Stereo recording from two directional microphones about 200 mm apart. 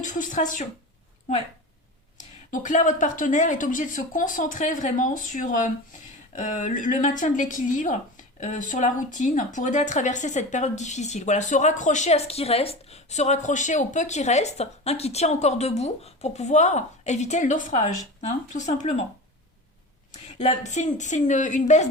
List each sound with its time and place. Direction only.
0.0 s a woman's voice: 40° left (ahead or behind)
2.1 s a woman's voice: 40° left (ahead or behind)
20.2 s a woman's voice: 35° left (ahead or behind)